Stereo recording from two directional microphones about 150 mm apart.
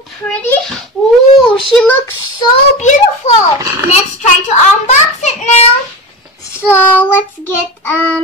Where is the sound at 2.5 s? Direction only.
50° left (ahead or behind).